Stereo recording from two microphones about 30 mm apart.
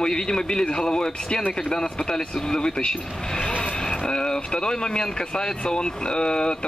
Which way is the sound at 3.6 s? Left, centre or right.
Left.